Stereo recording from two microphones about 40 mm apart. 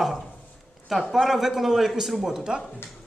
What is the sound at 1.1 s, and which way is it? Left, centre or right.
A man's voice, centre.